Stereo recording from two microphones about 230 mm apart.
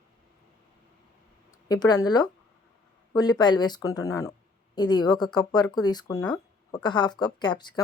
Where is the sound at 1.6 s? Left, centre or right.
Centre.